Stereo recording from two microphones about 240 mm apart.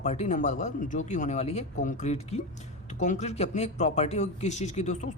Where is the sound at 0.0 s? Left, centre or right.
Left.